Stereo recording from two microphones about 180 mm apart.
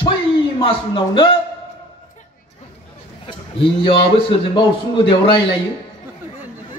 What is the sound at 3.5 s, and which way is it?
A man's voice, 30° left (ahead or behind).